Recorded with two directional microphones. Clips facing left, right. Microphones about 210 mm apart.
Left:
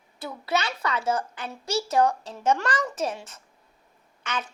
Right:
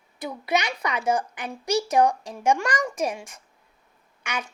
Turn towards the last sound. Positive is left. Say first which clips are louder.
# even
turn(degrees=-10)  # may be behind; listen again after turning